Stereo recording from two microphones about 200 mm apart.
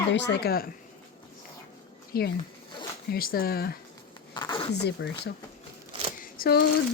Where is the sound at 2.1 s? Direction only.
50° left (ahead or behind).